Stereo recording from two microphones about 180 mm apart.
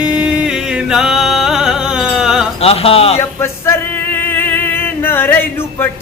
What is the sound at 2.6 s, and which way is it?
Speech, 35° left (ahead or behind).